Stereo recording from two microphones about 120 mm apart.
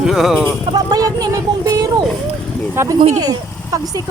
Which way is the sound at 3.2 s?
30° right (ahead or behind).